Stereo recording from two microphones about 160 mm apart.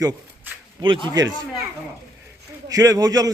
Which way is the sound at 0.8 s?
30° right (ahead or behind).